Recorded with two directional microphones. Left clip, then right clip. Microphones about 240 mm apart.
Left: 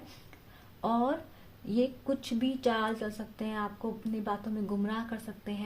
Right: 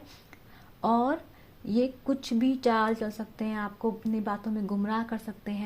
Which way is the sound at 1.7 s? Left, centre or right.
Right.